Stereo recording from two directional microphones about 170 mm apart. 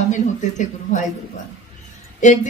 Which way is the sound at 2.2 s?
45° left (ahead or behind).